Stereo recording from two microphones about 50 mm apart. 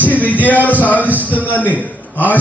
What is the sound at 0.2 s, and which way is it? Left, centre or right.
Speech, left.